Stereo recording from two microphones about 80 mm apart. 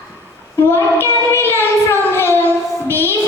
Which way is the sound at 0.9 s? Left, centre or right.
Left.